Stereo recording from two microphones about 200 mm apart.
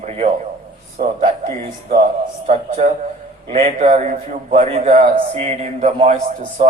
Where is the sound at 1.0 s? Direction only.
40° right (ahead or behind).